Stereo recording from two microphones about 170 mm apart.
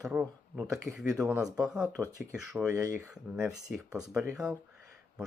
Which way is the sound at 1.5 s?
5° right (ahead or behind).